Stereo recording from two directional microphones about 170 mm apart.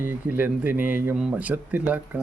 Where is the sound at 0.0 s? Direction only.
10° right (ahead or behind).